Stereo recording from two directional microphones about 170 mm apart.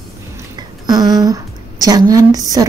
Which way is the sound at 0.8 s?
20° right (ahead or behind).